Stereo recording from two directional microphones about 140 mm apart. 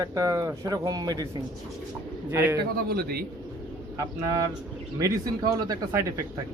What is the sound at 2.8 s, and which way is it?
Speech, 90° right.